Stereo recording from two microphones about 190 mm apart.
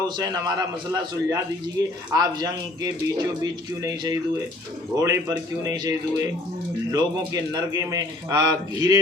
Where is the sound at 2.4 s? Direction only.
20° right (ahead or behind).